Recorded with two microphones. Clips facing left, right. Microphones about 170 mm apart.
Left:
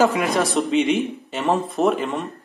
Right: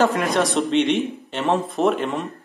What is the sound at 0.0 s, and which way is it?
Speech, centre (ahead or behind).